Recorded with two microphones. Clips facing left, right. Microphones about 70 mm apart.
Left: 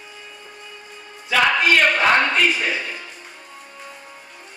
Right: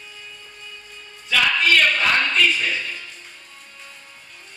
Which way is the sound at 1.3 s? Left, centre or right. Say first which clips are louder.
Left 2 dB; left.